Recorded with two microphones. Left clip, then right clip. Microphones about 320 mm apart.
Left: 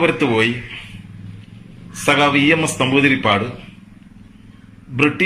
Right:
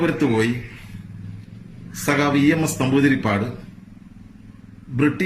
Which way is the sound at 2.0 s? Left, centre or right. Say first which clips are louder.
Left 5 dB; centre.